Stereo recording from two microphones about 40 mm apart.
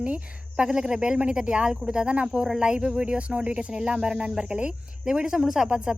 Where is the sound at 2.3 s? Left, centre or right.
Centre; by 3.6 s right.